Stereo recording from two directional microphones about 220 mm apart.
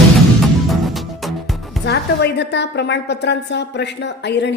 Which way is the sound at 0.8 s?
Centre (ahead or behind).